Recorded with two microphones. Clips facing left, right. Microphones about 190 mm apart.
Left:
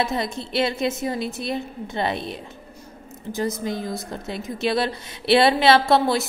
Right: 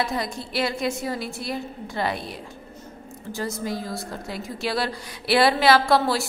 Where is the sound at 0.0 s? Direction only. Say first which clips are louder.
Left 2 dB; 25° left (ahead or behind).